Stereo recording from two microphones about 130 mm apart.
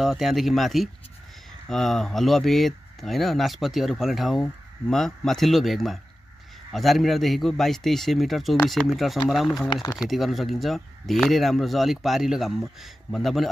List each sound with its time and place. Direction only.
0.0 s speech: centre (ahead or behind)